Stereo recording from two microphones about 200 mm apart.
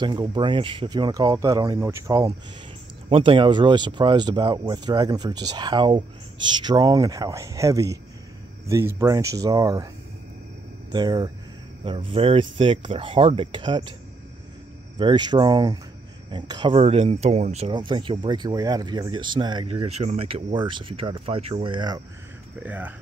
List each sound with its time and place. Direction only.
0.0 s speech: 20° right (ahead or behind)
10.9 s speech: 20° right (ahead or behind)
15.0 s speech: 20° right (ahead or behind)
22.7 s speech: 10° right (ahead or behind)